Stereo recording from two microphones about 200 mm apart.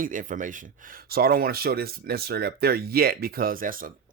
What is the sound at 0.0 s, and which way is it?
Speech, 40° right (ahead or behind).